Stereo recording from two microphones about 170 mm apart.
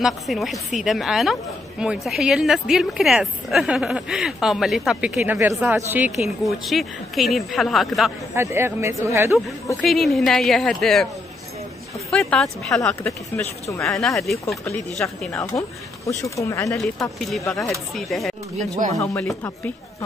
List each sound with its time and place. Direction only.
0.0 s a woman's voice: centre (ahead or behind)
8.4 s speech: 15° right (ahead or behind)
9.8 s a woman's voice: centre (ahead or behind)
12.1 s speech: 5° left (ahead or behind)
12.7 s speech: 20° left (ahead or behind)
13.7 s a woman's voice: centre (ahead or behind)
15.3 s speech: 15° left (ahead or behind)
17.2 s a woman's voice: centre (ahead or behind)
18.8 s speech: 45° right (ahead or behind)